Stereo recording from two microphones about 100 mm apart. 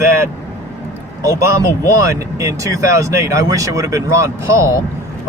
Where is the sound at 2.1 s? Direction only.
30° right (ahead or behind).